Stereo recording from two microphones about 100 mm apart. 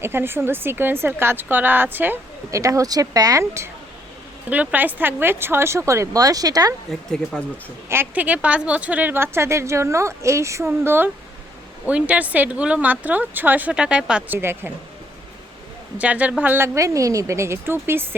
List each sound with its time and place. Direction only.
0.0 s speech: 25° right (ahead or behind)
2.5 s speech: 35° right (ahead or behind)
4.4 s speech: 15° right (ahead or behind); by 6.7 s 40° right (ahead or behind)
7.1 s speech: 5° left (ahead or behind)
7.9 s speech: 20° right (ahead or behind)
14.3 s speech: 25° right (ahead or behind)
16.0 s speech: 15° right (ahead or behind)